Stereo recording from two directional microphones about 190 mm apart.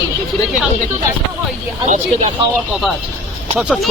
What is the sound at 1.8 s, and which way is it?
Speech, 40° right (ahead or behind).